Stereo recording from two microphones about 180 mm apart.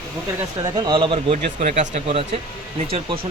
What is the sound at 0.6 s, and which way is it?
Speech, 25° right (ahead or behind).